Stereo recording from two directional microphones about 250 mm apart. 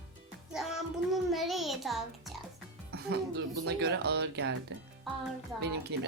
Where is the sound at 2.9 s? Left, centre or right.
Right.